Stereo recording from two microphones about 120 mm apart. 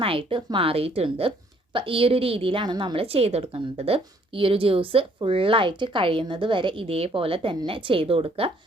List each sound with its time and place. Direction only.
0.0 s a woman's voice: 50° right (ahead or behind)